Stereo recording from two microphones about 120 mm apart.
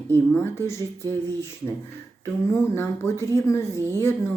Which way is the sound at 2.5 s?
20° left (ahead or behind).